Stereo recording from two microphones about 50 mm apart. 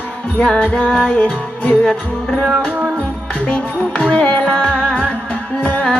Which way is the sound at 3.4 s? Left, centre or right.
Left.